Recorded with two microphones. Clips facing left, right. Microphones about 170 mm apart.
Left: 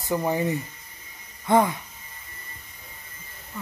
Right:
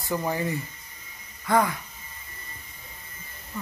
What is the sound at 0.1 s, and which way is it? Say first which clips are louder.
Speech: left 3 dB; 15° left (ahead or behind).